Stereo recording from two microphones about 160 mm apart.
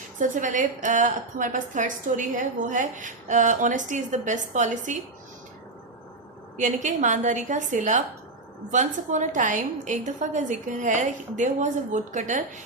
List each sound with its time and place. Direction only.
0.2 s a woman's voice: 50° right (ahead or behind)
6.6 s a woman's voice: 50° right (ahead or behind)